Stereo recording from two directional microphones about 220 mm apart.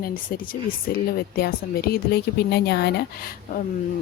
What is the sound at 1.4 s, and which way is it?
Speech, 45° left (ahead or behind).